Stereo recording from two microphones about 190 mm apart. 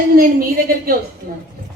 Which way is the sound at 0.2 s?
50° right (ahead or behind).